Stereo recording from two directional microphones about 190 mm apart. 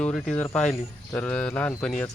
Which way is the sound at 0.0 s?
5° left (ahead or behind).